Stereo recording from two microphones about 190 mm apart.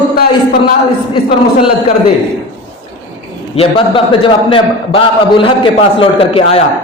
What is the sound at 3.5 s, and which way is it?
A man's voice, 30° left (ahead or behind).